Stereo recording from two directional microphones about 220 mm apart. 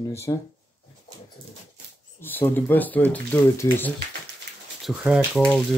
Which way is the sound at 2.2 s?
10° left (ahead or behind).